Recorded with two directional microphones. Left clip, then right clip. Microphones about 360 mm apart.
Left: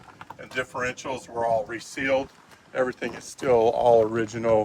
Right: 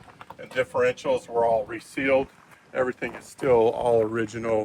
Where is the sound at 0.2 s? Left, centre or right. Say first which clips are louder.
Right 3 dB; centre.